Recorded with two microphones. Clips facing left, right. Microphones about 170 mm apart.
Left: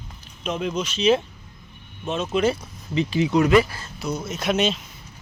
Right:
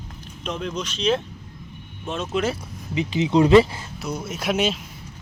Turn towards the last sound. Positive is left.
turn(degrees=-5)  # may be behind; listen again after turning